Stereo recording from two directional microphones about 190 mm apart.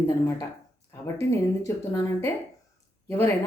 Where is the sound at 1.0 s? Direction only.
15° left (ahead or behind).